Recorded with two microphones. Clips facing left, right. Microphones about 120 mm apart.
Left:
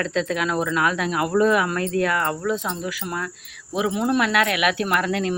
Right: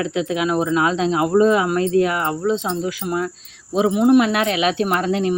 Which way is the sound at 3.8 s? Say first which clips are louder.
Right 7 dB; 25° right (ahead or behind).